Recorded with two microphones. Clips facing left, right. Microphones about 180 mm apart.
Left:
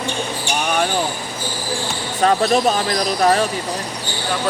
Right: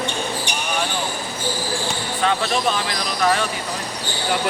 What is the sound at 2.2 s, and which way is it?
Speech, 40° left (ahead or behind).